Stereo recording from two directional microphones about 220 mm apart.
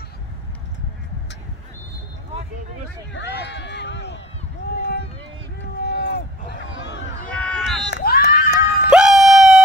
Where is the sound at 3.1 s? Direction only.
55° left (ahead or behind).